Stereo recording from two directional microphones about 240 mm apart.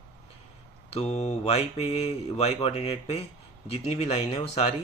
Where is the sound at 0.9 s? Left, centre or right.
Left.